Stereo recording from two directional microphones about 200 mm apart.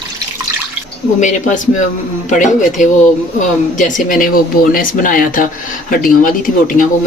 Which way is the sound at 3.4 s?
40° left (ahead or behind).